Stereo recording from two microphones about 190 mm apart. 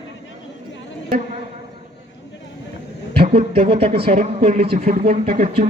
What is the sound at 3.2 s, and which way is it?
Speech, 30° right (ahead or behind).